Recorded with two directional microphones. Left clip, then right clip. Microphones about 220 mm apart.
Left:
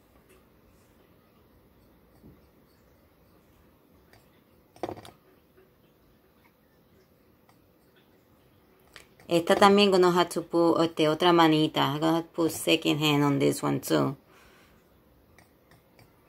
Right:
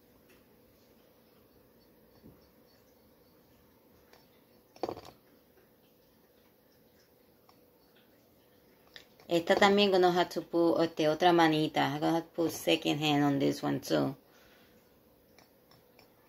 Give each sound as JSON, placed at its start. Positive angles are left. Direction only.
{"t": 9.4, "sound": "speech", "side_deg": 20}